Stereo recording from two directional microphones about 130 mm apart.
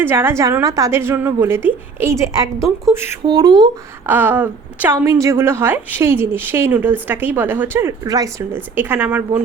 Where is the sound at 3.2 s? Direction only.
30° right (ahead or behind).